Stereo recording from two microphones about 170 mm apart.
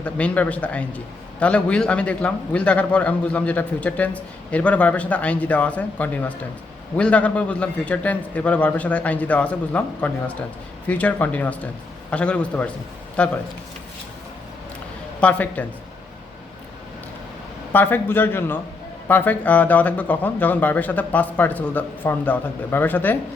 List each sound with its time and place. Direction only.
0.0 s a man's voice: 10° left (ahead or behind)
15.2 s a man's voice: 10° left (ahead or behind)
17.7 s a man's voice: 10° left (ahead or behind)